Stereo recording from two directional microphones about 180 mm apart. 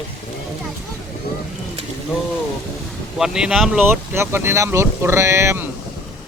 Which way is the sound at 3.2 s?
5° right (ahead or behind).